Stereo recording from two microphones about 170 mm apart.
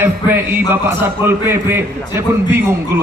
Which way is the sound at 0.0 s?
15° right (ahead or behind).